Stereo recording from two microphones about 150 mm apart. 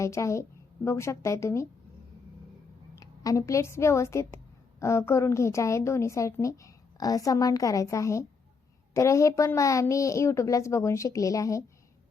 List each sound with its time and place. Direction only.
0.0 s a woman's voice: 20° left (ahead or behind)
2.9 s a woman's voice: 20° left (ahead or behind)